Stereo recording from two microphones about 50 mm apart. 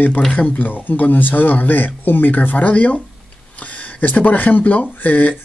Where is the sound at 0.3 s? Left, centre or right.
Left.